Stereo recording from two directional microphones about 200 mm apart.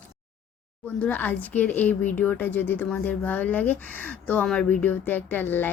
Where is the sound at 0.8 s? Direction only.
5° left (ahead or behind).